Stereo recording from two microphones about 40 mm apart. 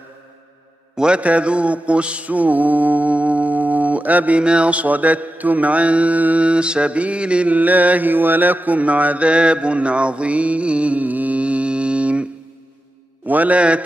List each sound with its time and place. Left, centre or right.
0.9 s mantra: right
4.4 s mantra: right
7.5 s mantra: right
9.3 s mantra: right
13.3 s a man's voice: right
13.6 s mantra: right